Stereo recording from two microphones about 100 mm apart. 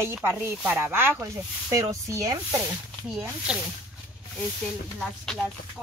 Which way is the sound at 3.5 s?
10° right (ahead or behind).